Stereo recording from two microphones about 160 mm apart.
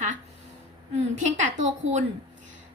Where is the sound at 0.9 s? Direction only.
50° right (ahead or behind).